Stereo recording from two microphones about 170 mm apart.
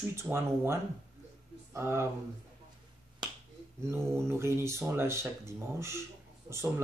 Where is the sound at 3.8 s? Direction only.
15° right (ahead or behind).